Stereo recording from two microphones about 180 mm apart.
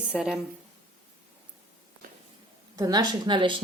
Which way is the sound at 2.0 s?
50° right (ahead or behind).